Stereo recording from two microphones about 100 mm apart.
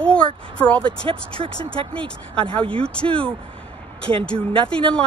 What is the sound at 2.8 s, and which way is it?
Speech, 10° left (ahead or behind).